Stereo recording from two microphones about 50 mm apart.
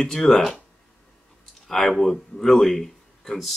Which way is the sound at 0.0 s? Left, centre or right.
Centre.